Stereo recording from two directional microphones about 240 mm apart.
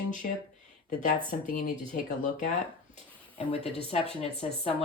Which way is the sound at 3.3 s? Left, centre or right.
Left.